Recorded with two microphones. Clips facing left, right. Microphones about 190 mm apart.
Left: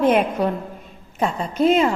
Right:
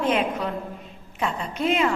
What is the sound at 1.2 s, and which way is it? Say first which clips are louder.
Speech: left 7 dB; 40° left (ahead or behind).